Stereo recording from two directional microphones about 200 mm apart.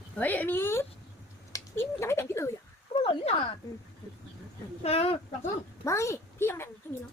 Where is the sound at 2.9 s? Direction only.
25° left (ahead or behind).